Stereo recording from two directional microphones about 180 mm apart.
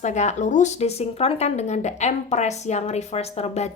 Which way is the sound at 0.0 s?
40° left (ahead or behind).